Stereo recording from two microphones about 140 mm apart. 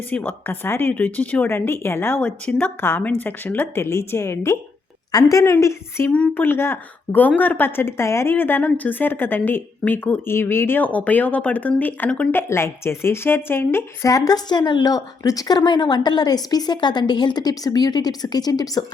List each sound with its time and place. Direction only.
0.1 s a woman's voice: 15° left (ahead or behind)